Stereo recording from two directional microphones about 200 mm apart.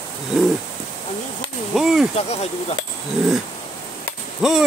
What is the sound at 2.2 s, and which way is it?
Speech, 30° left (ahead or behind).